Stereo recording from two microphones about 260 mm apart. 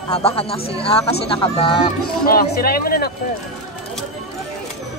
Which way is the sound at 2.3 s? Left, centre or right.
Left.